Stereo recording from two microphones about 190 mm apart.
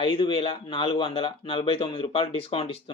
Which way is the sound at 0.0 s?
30° left (ahead or behind).